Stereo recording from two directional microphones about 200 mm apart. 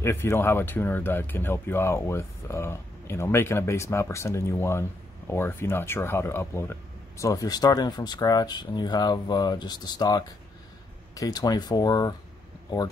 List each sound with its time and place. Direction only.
0.0 s speech: 15° left (ahead or behind)